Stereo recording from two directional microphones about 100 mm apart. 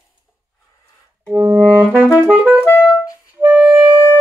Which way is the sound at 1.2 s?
20° right (ahead or behind).